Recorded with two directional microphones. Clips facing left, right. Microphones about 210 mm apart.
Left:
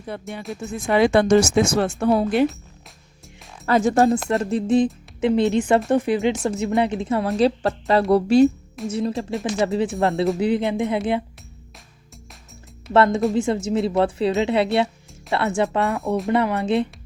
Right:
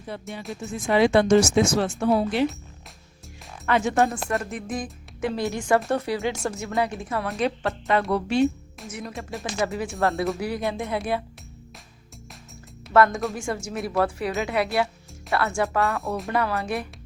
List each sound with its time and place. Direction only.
0.1 s speech: 55° left (ahead or behind)
3.7 s a woman's voice: 40° left (ahead or behind)
4.1 s a woman's voice: 25° left (ahead or behind)
10.0 s a woman's voice: 15° left (ahead or behind)
12.9 s a woman's voice: 25° left (ahead or behind)
16.0 s speech: centre (ahead or behind)
16.3 s a woman's voice: 20° left (ahead or behind)